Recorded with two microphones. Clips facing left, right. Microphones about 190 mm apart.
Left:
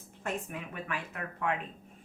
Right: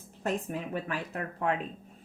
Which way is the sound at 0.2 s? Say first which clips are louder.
Right 5 dB; 35° right (ahead or behind).